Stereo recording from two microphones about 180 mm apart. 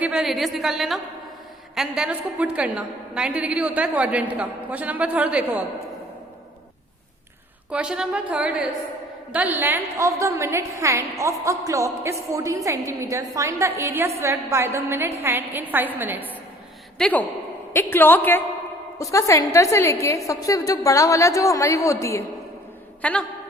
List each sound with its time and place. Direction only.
0.0 s a woman's voice: 5° right (ahead or behind)
7.7 s a woman's voice: 5° right (ahead or behind)
17.0 s a woman's voice: 10° left (ahead or behind)